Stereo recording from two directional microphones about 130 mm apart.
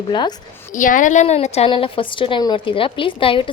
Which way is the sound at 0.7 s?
90° left.